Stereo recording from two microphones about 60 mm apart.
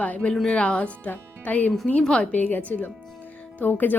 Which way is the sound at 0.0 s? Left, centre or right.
Left.